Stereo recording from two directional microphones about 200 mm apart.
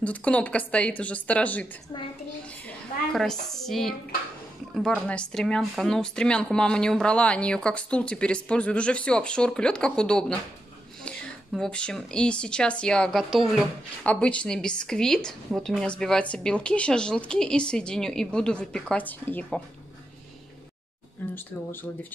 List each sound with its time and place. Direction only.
0.0 s a woman's voice: 5° left (ahead or behind)
21.2 s speech: 5° left (ahead or behind)